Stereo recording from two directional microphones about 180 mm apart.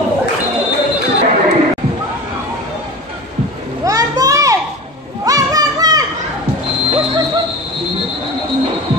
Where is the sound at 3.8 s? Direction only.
20° right (ahead or behind).